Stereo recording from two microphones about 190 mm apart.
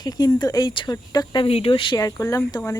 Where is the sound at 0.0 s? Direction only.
20° left (ahead or behind).